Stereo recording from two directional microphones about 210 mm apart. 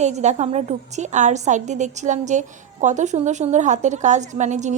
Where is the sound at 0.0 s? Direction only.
35° right (ahead or behind).